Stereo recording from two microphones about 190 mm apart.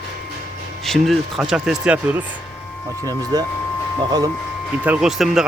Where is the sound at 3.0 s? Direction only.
20° right (ahead or behind).